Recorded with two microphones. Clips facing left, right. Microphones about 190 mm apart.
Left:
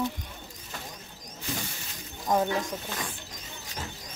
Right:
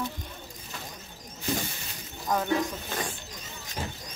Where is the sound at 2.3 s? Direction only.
25° left (ahead or behind).